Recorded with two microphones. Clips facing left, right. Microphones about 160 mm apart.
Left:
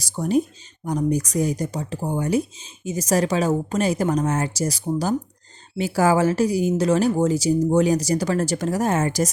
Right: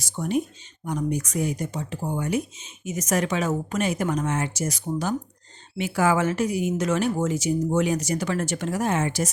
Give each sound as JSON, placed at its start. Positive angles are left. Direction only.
{"t": 0.0, "sound": "speech", "side_deg": 35}